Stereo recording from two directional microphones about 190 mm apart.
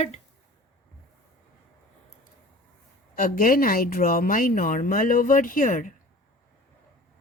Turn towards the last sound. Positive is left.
turn(degrees=45)  # may be behind; listen again after turning